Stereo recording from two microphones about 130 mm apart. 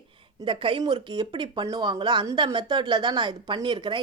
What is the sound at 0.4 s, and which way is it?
Speech, 40° right (ahead or behind).